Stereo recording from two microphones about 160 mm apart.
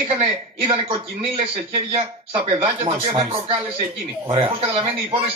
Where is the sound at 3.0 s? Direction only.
30° right (ahead or behind).